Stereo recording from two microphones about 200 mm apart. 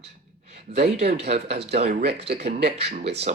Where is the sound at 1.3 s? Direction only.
30° right (ahead or behind).